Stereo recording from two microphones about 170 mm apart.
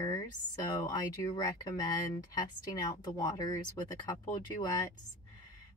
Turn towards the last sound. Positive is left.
turn(degrees=20)  # may be behind; listen again after turning